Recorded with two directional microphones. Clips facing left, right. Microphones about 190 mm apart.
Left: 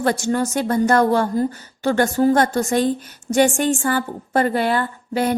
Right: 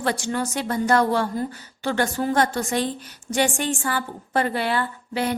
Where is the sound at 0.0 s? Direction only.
45° left (ahead or behind).